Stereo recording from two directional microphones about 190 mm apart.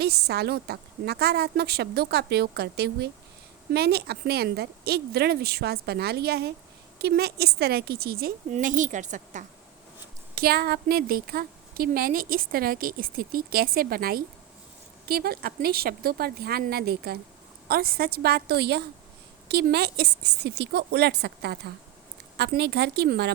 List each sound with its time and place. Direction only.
0.0 s a woman's voice: 55° right (ahead or behind)
8.4 s a woman's voice: 40° right (ahead or behind)
10.3 s a woman's voice: 55° right (ahead or behind)